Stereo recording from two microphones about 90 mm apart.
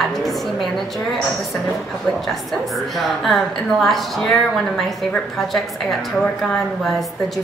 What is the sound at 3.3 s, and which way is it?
Speech, centre (ahead or behind).